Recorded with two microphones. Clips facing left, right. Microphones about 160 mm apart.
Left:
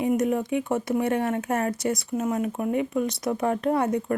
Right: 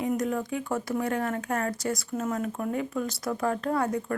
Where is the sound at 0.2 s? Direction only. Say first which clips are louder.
Left 5 dB; 25° left (ahead or behind).